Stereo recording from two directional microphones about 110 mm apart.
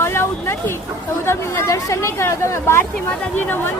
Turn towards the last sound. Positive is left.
turn(degrees=15)  # may be behind; listen again after turning